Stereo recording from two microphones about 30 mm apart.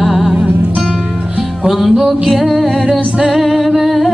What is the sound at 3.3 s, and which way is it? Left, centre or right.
Female singing, centre.